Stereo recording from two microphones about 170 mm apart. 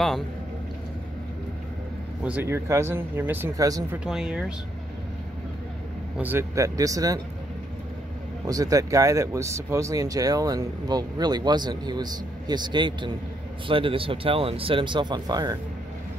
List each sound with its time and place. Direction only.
2.2 s speech: 10° right (ahead or behind)
4.0 s speech: 5° right (ahead or behind)
6.1 s speech: 10° right (ahead or behind)
8.5 s speech: 20° right (ahead or behind)